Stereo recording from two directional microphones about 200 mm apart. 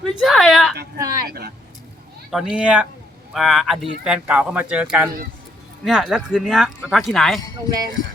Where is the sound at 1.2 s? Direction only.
50° right (ahead or behind).